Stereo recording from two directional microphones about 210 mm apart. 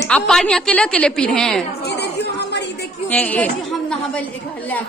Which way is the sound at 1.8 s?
50° left (ahead or behind).